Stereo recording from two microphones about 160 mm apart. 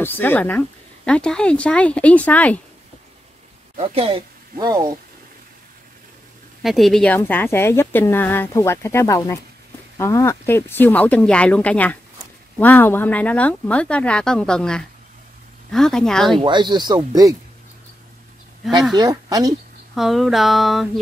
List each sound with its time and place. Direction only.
0.0 s a woman's voice: 10° left (ahead or behind)
3.7 s a woman's voice: 40° right (ahead or behind)
4.6 s speech: 25° right (ahead or behind)
6.6 s a woman's voice: centre (ahead or behind)
15.7 s a sound: 5° left (ahead or behind)
16.3 s speech: 30° right (ahead or behind)
18.9 s speech: 25° right (ahead or behind)
20.0 s a sound: centre (ahead or behind)